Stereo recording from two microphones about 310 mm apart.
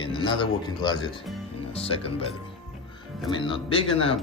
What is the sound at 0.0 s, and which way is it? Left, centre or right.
A man's voice, centre.